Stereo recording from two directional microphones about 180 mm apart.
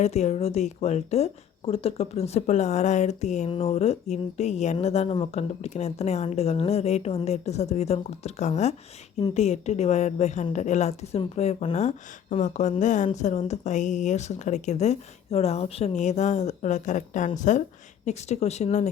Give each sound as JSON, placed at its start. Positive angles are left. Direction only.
{"t": 0.0, "sound": "speech", "side_deg": 40}